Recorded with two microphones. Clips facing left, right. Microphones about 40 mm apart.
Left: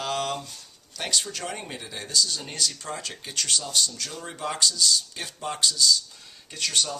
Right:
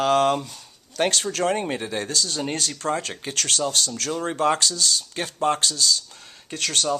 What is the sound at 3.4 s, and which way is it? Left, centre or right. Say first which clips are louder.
Speech: right 3 dB; right.